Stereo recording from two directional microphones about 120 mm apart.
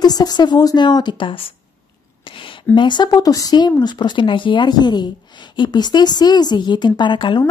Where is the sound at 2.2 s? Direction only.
45° left (ahead or behind).